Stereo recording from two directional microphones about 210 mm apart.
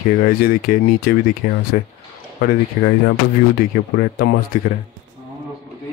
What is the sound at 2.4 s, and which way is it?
Speech, 50° left (ahead or behind).